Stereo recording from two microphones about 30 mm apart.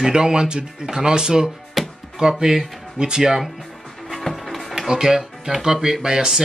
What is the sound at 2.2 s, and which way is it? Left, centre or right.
Speech, centre.